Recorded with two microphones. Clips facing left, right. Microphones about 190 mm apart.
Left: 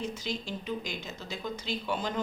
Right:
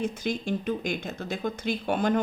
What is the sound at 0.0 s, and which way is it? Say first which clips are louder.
A woman's voice: right 6 dB; 50° right (ahead or behind).